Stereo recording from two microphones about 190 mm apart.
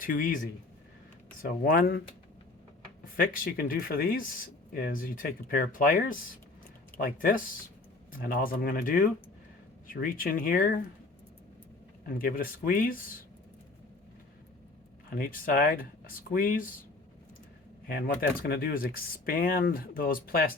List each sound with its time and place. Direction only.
0.0 s speech: 45° left (ahead or behind)
3.2 s speech: 50° left (ahead or behind)
12.0 s speech: 50° left (ahead or behind)
15.1 s speech: 50° left (ahead or behind)
17.8 s speech: 50° left (ahead or behind)